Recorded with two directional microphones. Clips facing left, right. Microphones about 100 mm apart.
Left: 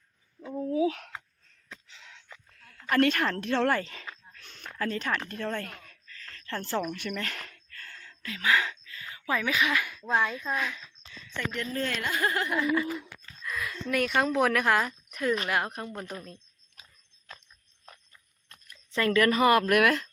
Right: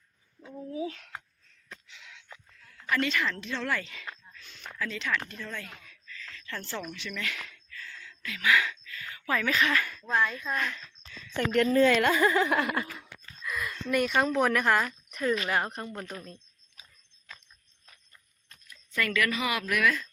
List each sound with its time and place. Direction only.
0.7 s speech: 85° left
1.9 s a sound: 35° left (ahead or behind)
2.9 s a woman's voice: 50° left (ahead or behind)
3.8 s speech: 40° left (ahead or behind)
4.4 s a sound: 55° left (ahead or behind)
4.8 s a woman's voice: 45° left (ahead or behind)
5.3 s a woman's voice: 55° left (ahead or behind)
5.8 s a sound: 45° left (ahead or behind)
6.9 s speech: 50° left (ahead or behind); by 10.9 s 5° left (ahead or behind)
11.3 s a woman's voice: 60° right (ahead or behind); by 12.7 s 90° right
13.4 s speech: centre (ahead or behind)
18.9 s a woman's voice: 30° left (ahead or behind); by 20.1 s 65° left (ahead or behind)